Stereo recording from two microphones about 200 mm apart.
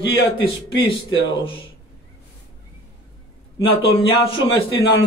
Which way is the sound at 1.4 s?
25° left (ahead or behind).